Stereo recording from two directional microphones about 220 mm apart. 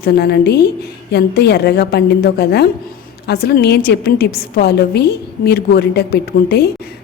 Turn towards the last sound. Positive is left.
turn(degrees=45)  # may be behind; listen again after turning